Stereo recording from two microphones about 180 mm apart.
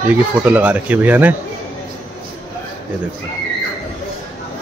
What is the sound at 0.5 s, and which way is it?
Speech, 10° right (ahead or behind).